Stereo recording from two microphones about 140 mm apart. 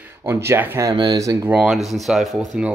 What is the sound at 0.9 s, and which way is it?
Speech, 30° right (ahead or behind).